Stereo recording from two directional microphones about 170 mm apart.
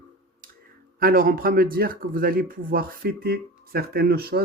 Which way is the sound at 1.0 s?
55° right (ahead or behind).